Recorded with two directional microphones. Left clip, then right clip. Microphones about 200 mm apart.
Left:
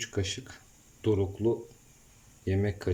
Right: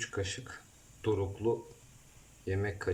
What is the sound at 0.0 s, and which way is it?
Speech, 15° left (ahead or behind).